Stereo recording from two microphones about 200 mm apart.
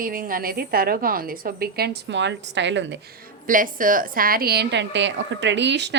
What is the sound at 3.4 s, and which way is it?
A woman's voice, 45° right (ahead or behind).